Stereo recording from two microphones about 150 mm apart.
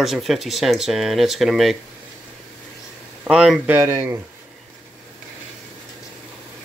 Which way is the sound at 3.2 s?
5° right (ahead or behind).